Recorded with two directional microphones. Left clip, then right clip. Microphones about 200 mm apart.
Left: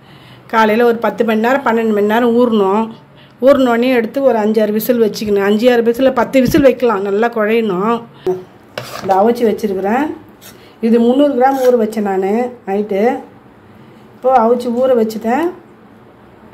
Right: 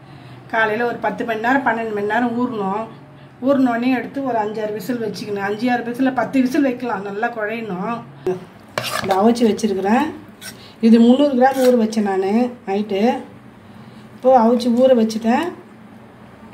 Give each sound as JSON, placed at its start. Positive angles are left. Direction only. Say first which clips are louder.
{"t": 0.5, "sound": "speech", "louder": "left 7 dB", "side_deg": 45}
{"t": 8.3, "sound": "stir", "louder": "left 5 dB", "side_deg": 0}
{"t": 9.2, "sound": "speech", "louder": "left 3 dB", "side_deg": 15}
{"t": 14.2, "sound": "speech", "louder": "left 2 dB", "side_deg": 20}